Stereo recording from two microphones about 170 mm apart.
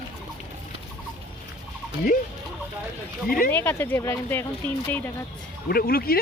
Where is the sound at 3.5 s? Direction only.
10° left (ahead or behind).